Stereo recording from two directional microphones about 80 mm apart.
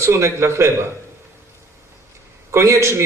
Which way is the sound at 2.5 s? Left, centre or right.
Right.